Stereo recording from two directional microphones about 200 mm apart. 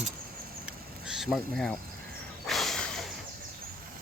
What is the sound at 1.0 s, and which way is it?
Speech, centre (ahead or behind).